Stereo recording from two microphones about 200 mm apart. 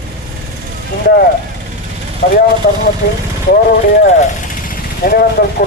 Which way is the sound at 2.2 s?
50° left (ahead or behind).